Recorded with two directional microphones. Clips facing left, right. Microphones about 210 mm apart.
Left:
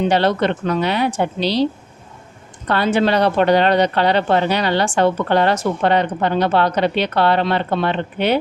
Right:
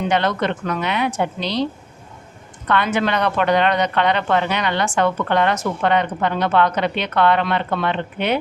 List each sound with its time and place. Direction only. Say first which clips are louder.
0.0 s a woman's voice: left 4 dB; 30° left (ahead or behind)
2.6 s a woman's voice: left 3 dB; 30° left (ahead or behind)